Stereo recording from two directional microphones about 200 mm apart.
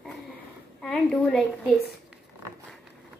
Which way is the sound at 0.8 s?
5° left (ahead or behind).